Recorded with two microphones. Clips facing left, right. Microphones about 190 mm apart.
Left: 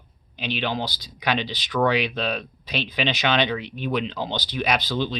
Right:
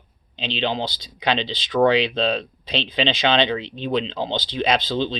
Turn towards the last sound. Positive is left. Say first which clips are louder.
# right 3 dB
turn(degrees=-25)  # may be behind; listen again after turning